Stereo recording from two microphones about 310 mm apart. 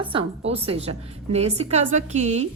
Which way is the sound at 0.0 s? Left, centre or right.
Centre.